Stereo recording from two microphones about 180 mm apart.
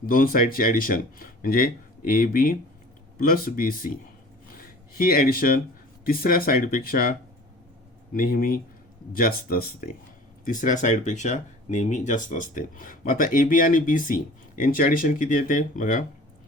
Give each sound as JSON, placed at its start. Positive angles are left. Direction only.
{"t": 0.0, "sound": "speech", "side_deg": 55}
{"t": 10.4, "sound": "speech", "side_deg": 45}